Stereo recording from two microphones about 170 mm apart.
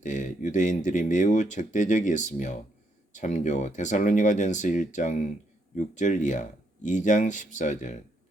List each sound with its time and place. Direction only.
0.0 s speech: 45° left (ahead or behind)